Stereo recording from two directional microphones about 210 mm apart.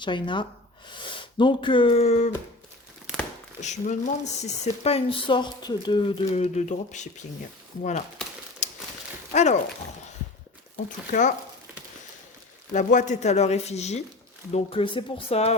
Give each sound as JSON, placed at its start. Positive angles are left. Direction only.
{"t": 0.0, "sound": "speech", "side_deg": 20}
{"t": 3.1, "sound": "crumpling", "side_deg": -5}
{"t": 3.6, "sound": "speech", "side_deg": 35}
{"t": 8.6, "sound": "crumpling", "side_deg": 35}
{"t": 9.3, "sound": "speech", "side_deg": 30}
{"t": 10.8, "sound": "speech", "side_deg": 40}
{"t": 12.7, "sound": "speech", "side_deg": 35}